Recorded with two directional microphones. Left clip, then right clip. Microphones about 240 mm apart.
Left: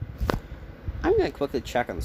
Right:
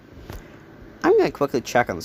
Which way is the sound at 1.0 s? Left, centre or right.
Right.